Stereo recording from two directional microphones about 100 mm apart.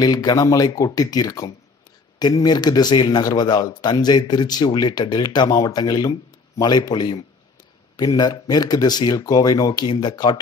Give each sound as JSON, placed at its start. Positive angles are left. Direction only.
{"t": 0.0, "sound": "a man's voice", "side_deg": 40}